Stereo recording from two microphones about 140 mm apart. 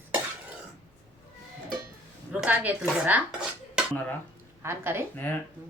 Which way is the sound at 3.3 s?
5° right (ahead or behind).